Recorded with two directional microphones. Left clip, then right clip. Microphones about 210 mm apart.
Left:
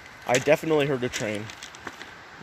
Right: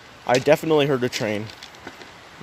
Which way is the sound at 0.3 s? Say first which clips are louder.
Right 4 dB; 20° right (ahead or behind).